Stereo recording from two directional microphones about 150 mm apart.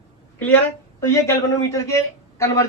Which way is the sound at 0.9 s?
20° left (ahead or behind).